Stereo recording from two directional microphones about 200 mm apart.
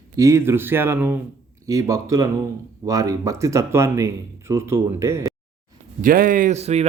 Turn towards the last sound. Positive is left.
turn(degrees=-35)  # may be behind; listen again after turning